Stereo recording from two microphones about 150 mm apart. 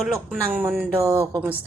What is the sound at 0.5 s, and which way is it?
Speech, 10° right (ahead or behind).